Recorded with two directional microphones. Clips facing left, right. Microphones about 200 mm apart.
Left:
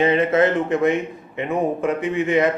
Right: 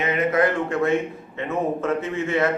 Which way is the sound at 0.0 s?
30° left (ahead or behind).